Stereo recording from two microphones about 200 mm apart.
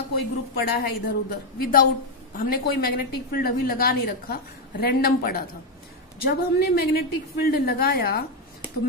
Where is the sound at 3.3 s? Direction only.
45° left (ahead or behind).